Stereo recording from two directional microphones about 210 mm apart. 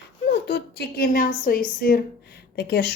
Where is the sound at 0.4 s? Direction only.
50° left (ahead or behind).